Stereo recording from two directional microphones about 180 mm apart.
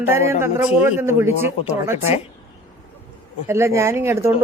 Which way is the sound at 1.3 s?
40° left (ahead or behind).